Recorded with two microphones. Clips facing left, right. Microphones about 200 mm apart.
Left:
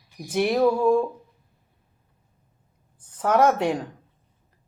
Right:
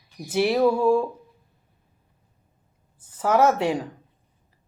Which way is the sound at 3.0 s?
5° right (ahead or behind).